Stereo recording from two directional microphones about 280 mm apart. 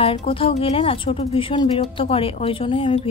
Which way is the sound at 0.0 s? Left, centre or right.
Left.